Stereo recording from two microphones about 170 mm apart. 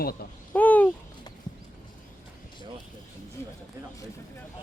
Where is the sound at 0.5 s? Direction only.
10° left (ahead or behind).